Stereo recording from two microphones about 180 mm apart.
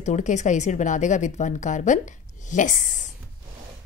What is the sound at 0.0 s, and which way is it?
A woman's voice, 40° left (ahead or behind).